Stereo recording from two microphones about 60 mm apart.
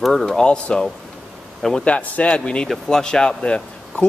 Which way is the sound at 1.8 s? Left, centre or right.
Left.